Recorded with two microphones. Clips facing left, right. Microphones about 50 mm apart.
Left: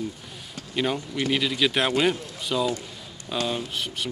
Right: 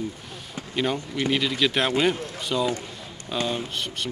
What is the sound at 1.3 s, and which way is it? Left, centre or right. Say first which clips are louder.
Speech: even; centre.